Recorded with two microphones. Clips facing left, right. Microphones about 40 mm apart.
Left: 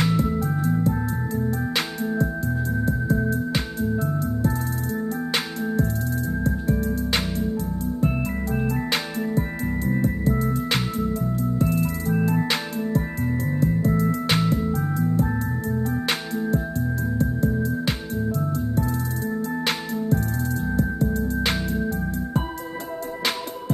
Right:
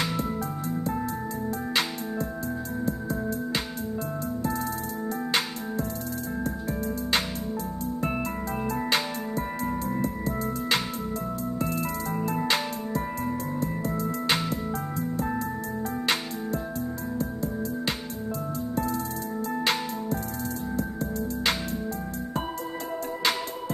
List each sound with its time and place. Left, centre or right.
0.0 s music: left
2.8 s music: left
7.5 s music: right
11.5 s music: right
13.8 s music: left
15.8 s music: left
20.7 s music: left